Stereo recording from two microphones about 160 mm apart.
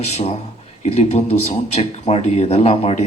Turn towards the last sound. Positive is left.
turn(degrees=40)  # may be behind; listen again after turning